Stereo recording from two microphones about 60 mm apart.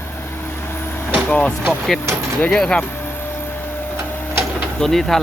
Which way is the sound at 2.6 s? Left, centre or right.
Centre.